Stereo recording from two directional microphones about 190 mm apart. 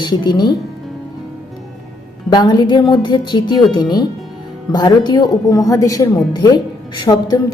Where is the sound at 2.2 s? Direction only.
25° left (ahead or behind).